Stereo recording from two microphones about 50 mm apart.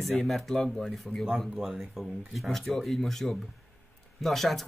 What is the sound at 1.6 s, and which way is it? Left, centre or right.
A man's voice, centre.